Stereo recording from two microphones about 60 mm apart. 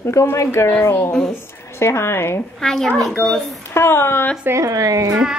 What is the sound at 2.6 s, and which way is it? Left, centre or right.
Speech, centre.